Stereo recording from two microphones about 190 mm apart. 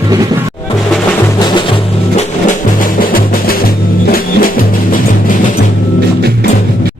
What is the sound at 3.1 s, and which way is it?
Music, 50° left (ahead or behind).